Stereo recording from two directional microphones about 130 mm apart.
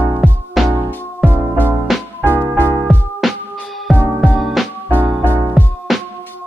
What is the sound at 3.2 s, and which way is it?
Music, centre (ahead or behind).